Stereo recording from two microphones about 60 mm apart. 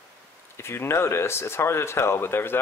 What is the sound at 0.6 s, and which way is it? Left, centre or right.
Speech, left.